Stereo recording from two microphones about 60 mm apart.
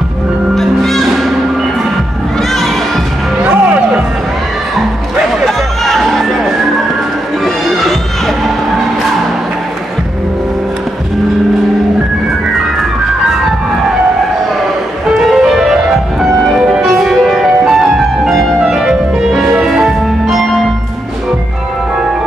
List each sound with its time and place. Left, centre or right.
0.6 s music: centre
3.4 s music: centre
5.1 s music: centre
15.2 s music: centre